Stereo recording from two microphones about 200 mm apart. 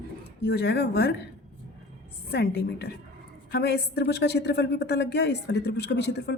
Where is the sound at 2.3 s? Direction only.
55° left (ahead or behind).